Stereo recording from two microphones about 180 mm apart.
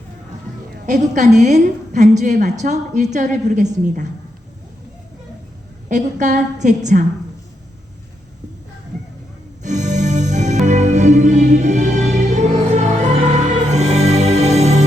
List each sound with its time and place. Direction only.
0.9 s a woman's voice: 40° right (ahead or behind)
5.9 s a woman's voice: 45° right (ahead or behind)
9.6 s music: 40° right (ahead or behind)